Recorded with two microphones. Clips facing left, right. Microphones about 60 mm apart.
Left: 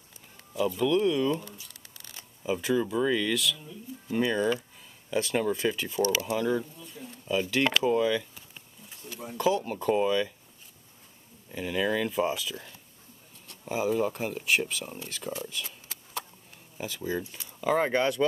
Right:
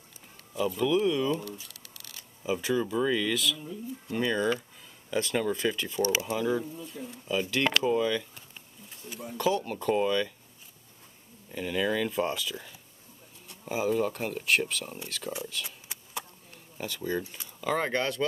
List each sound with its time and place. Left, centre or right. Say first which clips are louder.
0.5 s speech: left 1 dB; centre
1.4 s crumpling: right 5 dB; left
2.4 s speech: left 1 dB; centre
11.5 s speech: left 1 dB; centre
16.7 s speech: even; centre